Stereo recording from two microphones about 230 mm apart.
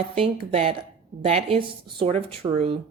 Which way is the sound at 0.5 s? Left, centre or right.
Right.